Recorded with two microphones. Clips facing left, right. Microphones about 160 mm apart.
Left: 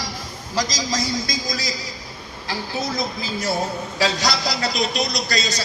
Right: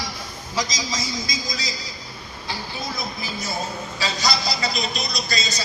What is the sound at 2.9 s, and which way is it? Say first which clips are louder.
A man's voice: left 5 dB; 90° left.